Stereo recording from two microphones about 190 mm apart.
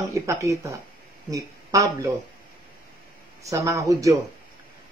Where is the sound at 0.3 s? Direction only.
15° right (ahead or behind).